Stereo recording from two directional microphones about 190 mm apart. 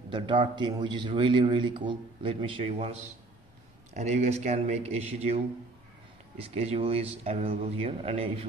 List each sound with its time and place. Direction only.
0.6 s a man's voice: 25° right (ahead or behind)